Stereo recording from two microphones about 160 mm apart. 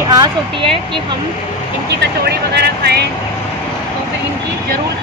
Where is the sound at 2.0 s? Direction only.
90° right.